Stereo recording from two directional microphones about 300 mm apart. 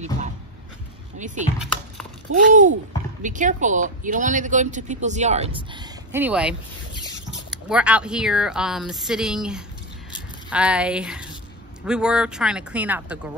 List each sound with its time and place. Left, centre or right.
1.1 s speech: right
2.3 s a sound: right
3.2 s speech: right; by 6.5 s centre
7.5 s speech: centre